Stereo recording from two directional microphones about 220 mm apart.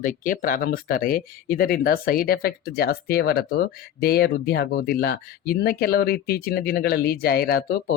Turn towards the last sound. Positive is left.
turn(degrees=45)  # may be behind; listen again after turning